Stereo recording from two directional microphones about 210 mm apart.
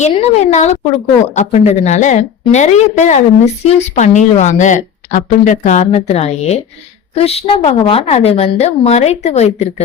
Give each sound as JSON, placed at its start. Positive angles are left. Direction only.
{"t": 0.0, "sound": "a woman's voice", "side_deg": 35}